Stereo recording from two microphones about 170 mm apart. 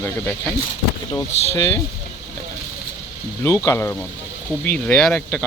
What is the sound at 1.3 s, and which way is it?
Speech, 40° left (ahead or behind).